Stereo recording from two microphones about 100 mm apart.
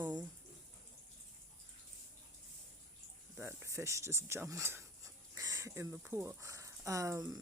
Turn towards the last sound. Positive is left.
turn(degrees=-35)  # may be behind; listen again after turning